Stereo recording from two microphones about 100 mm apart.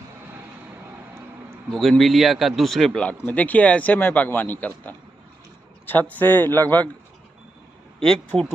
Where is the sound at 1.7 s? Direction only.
Centre (ahead or behind); by 6.9 s 20° left (ahead or behind).